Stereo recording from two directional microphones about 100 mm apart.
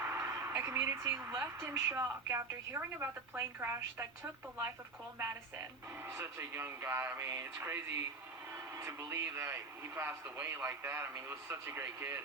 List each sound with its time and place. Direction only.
0.0 s a sound: 25° right (ahead or behind)
1.4 s a man's voice: 25° right (ahead or behind)
6.1 s a man's voice: 25° right (ahead or behind)